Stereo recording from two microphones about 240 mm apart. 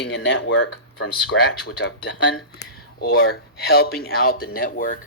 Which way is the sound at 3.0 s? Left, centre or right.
Left.